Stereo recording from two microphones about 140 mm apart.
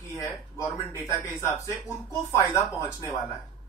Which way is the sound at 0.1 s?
20° left (ahead or behind).